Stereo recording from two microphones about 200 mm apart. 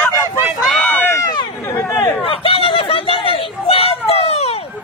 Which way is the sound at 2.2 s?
25° left (ahead or behind).